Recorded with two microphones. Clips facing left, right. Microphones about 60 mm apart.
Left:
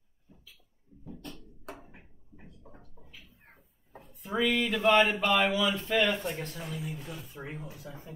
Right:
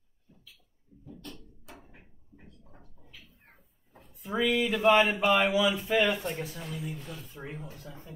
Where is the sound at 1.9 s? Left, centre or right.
Centre.